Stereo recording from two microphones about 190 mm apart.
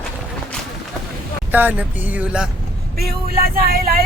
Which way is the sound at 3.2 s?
55° right (ahead or behind).